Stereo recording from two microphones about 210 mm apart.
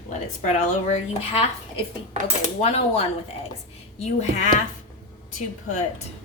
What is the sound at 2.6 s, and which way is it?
Speech, 30° left (ahead or behind).